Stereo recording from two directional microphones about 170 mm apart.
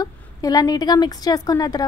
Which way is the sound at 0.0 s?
20° left (ahead or behind).